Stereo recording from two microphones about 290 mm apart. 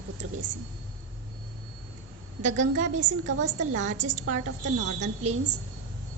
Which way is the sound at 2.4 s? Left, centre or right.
Right.